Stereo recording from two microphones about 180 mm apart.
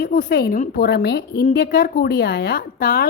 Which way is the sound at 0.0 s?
55° left (ahead or behind).